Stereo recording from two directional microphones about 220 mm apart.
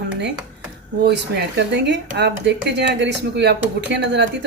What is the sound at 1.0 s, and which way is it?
Speech, 50° right (ahead or behind).